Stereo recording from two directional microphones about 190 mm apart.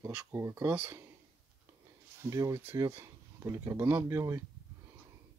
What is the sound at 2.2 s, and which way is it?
Speech, 15° right (ahead or behind).